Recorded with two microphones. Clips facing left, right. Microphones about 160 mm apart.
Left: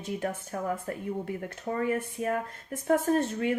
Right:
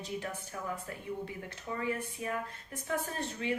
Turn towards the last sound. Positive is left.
turn(degrees=50)  # may be behind; listen again after turning